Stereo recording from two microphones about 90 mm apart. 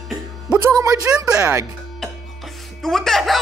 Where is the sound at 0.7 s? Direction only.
35° right (ahead or behind).